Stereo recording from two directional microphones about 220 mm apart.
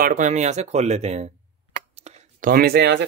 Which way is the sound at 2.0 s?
40° right (ahead or behind).